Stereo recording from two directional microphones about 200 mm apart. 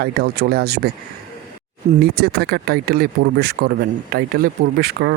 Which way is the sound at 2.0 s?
50° right (ahead or behind).